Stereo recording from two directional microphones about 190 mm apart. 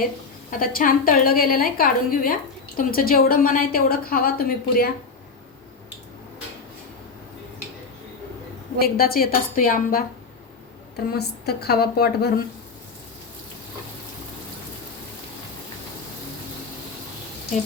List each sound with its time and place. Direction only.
0.6 s a woman's voice: 50° left (ahead or behind)
8.8 s a woman's voice: 50° left (ahead or behind)
10.9 s a woman's voice: 55° left (ahead or behind)